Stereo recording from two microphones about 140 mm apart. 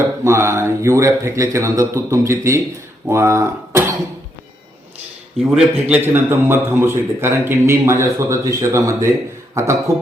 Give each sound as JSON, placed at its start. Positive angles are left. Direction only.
{"t": 0.3, "sound": "speech", "side_deg": -20}
{"t": 5.4, "sound": "a man's voice", "side_deg": -5}